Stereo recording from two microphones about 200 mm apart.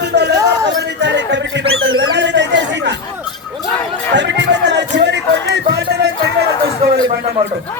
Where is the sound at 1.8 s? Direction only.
65° right (ahead or behind).